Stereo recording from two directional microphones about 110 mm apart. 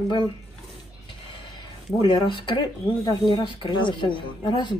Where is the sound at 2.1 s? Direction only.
45° left (ahead or behind).